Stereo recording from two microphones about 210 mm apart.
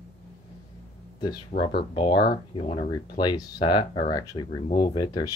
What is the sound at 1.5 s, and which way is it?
Speech, 40° left (ahead or behind).